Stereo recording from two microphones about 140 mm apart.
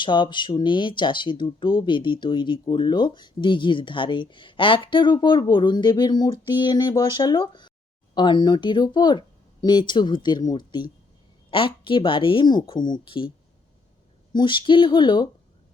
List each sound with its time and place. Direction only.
0.0 s speech: 35° left (ahead or behind)
14.3 s speech: 35° left (ahead or behind)